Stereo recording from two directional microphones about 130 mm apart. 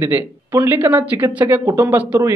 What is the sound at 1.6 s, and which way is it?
Speech, 25° right (ahead or behind).